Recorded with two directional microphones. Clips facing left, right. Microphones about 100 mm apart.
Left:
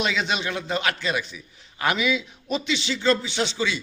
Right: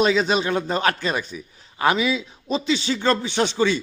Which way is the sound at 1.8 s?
30° right (ahead or behind).